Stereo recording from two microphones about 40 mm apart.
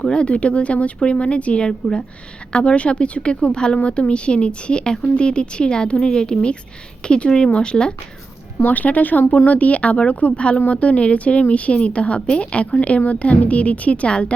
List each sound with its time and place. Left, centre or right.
0.0 s speech: left
8.7 s speech: left